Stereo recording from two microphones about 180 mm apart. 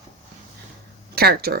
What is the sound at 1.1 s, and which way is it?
Speech, 60° right (ahead or behind).